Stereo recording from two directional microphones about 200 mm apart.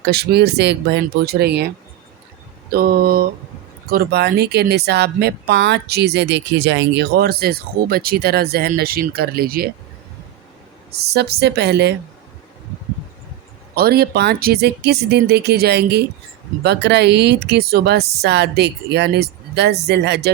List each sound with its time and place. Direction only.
0.0 s speech: 55° right (ahead or behind)
2.7 s speech: 50° right (ahead or behind)
10.9 s speech: 55° right (ahead or behind)
13.7 s speech: 50° right (ahead or behind)